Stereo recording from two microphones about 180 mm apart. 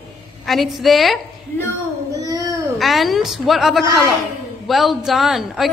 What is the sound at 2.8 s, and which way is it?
A man's voice, centre (ahead or behind).